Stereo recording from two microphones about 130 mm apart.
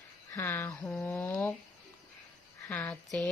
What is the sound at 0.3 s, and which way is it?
Speech, 15° left (ahead or behind).